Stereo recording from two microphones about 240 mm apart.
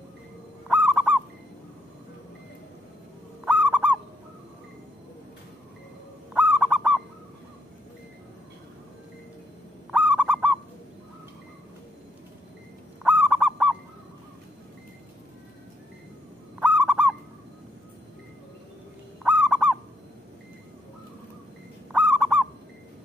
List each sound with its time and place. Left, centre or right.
0.7 s fowl: centre
3.4 s fowl: centre
6.3 s owl: centre
9.8 s goose: centre
13.0 s goose: centre
16.5 s fowl: centre
19.2 s fowl: centre
21.9 s owl: centre